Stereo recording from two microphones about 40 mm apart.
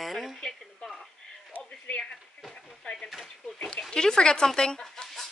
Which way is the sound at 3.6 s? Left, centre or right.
Left.